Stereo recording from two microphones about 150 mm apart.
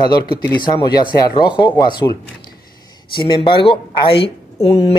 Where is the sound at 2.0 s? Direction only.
20° left (ahead or behind).